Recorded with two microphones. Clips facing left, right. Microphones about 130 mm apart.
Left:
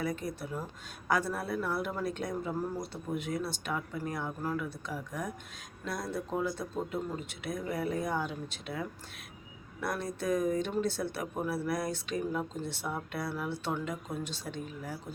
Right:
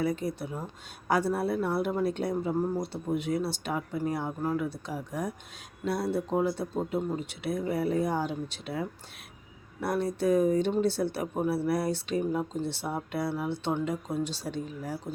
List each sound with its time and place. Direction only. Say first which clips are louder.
0.0 s speech: right 5 dB; 25° right (ahead or behind)